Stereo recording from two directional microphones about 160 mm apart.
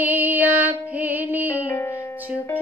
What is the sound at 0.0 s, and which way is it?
Music, 10° right (ahead or behind).